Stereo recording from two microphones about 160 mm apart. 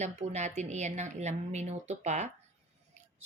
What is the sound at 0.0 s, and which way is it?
Speech, 45° right (ahead or behind).